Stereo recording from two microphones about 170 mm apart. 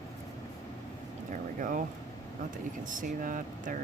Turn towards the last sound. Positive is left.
turn(degrees=-50)  # may be behind; listen again after turning